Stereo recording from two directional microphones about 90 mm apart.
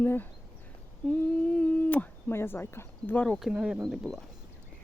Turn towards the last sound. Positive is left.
turn(degrees=0)  # may be behind; listen again after turning